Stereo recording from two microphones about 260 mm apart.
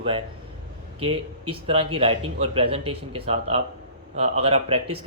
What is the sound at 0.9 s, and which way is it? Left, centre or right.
Speech, right.